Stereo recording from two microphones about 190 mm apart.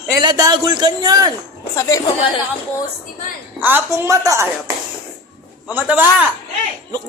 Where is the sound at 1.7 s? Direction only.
15° left (ahead or behind).